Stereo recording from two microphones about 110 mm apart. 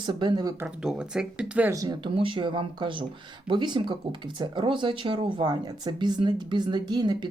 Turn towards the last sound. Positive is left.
turn(degrees=-40)  # may be behind; listen again after turning